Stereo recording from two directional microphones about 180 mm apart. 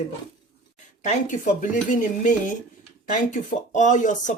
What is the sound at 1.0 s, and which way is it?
Speech, 40° left (ahead or behind).